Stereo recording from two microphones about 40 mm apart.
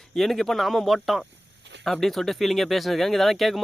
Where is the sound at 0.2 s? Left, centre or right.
Centre.